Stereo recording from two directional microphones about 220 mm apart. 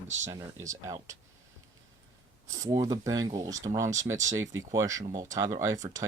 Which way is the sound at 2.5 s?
15° right (ahead or behind).